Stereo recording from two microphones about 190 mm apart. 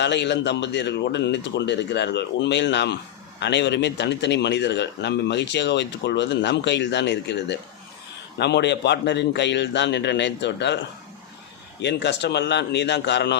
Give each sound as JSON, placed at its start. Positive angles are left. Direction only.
{"t": 0.0, "sound": "speech", "side_deg": 65}
{"t": 11.8, "sound": "speech", "side_deg": 65}